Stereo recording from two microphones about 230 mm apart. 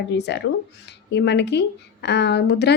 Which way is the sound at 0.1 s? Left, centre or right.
Left.